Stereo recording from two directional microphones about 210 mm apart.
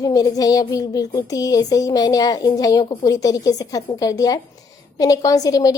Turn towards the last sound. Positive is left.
turn(degrees=15)  # may be behind; listen again after turning